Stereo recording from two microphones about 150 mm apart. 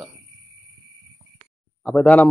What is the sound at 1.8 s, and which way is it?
Speech, 5° left (ahead or behind).